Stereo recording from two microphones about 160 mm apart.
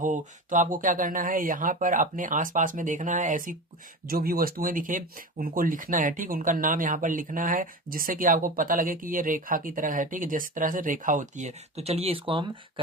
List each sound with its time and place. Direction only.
0.0 s speech: 55° right (ahead or behind)
4.0 s speech: 70° right (ahead or behind); by 12.8 s 30° right (ahead or behind)